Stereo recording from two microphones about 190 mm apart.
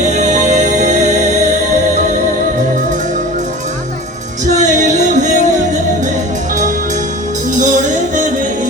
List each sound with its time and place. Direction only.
0.0 s music: 40° right (ahead or behind)
4.4 s music: 40° right (ahead or behind)
7.5 s music: 40° right (ahead or behind)